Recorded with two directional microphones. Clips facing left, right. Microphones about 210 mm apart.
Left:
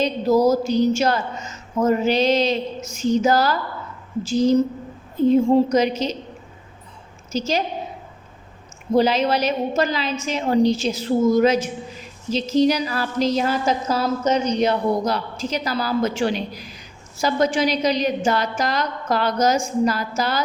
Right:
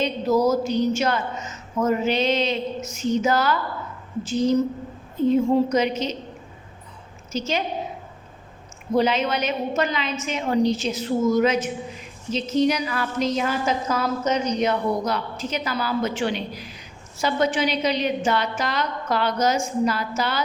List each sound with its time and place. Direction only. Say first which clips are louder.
0.0 s a woman's voice: left 3 dB; 35° left (ahead or behind)
5.3 s a woman's voice: left 3 dB; 35° left (ahead or behind)
7.3 s a woman's voice: left 3 dB; 35° left (ahead or behind)
9.0 s a woman's voice: left 3 dB; 35° left (ahead or behind)